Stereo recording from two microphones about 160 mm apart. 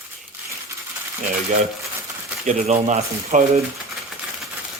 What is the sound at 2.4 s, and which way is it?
Speech, 45° right (ahead or behind).